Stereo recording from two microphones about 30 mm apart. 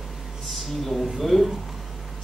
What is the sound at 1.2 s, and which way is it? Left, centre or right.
Speech, centre.